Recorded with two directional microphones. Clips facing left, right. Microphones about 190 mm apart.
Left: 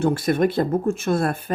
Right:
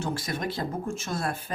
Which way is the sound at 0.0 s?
55° left (ahead or behind).